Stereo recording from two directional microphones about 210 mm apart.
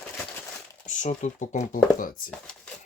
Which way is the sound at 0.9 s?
35° left (ahead or behind).